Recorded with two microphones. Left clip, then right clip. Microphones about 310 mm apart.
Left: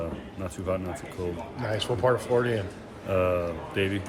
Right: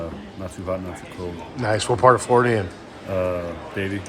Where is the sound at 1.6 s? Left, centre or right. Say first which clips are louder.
Right 10 dB; right.